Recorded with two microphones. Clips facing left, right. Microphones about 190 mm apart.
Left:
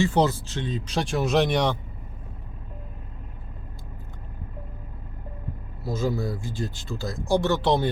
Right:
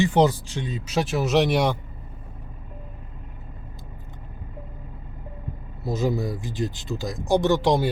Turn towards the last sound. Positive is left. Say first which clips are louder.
# right 2 dB
turn(degrees=-10)  # may be behind; listen again after turning